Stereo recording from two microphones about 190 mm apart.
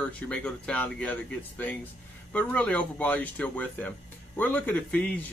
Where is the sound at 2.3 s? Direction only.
5° left (ahead or behind).